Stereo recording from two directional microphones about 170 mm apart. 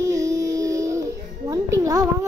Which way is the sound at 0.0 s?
20° right (ahead or behind).